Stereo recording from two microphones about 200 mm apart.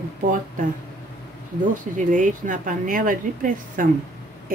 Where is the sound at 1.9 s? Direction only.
40° right (ahead or behind).